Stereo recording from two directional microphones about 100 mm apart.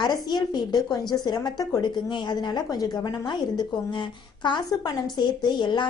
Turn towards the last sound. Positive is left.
turn(degrees=50)  # may be behind; listen again after turning